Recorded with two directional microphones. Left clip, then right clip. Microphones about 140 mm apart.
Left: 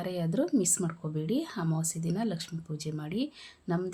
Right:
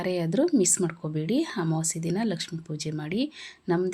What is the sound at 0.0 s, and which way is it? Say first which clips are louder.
Speech: right 6 dB; 15° right (ahead or behind).